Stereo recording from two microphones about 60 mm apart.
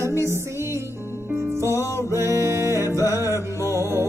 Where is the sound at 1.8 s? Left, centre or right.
Left.